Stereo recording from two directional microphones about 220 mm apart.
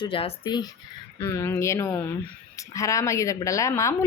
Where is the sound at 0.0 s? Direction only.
25° left (ahead or behind).